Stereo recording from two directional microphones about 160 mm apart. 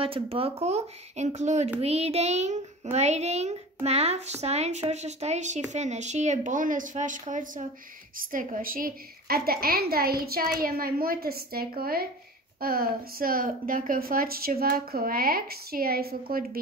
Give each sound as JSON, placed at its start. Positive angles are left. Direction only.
{"t": 0.0, "sound": "a child's voice", "side_deg": -35}